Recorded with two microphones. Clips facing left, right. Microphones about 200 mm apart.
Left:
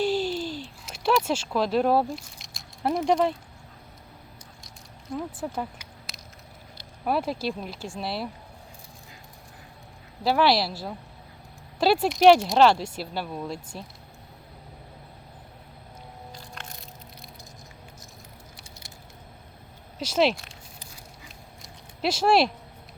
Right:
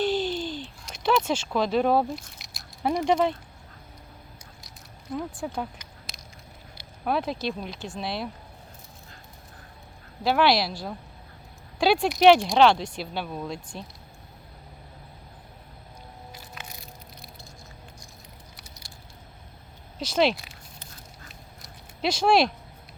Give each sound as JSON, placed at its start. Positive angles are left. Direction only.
{"t": 0.0, "sound": "a sound", "side_deg": 5}
{"t": 5.1, "sound": "speech", "side_deg": 5}
{"t": 7.0, "sound": "speech", "side_deg": 5}
{"t": 10.2, "sound": "speech", "side_deg": 5}
{"t": 16.3, "sound": "music", "side_deg": -5}
{"t": 18.5, "sound": "patter", "side_deg": 25}
{"t": 20.0, "sound": "speech", "side_deg": 5}
{"t": 21.6, "sound": "a sound", "side_deg": 5}